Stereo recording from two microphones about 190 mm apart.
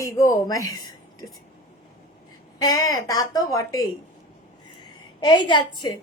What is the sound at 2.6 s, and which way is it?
A woman's voice, 15° left (ahead or behind).